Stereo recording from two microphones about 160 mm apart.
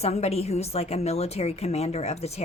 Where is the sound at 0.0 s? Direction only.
40° left (ahead or behind).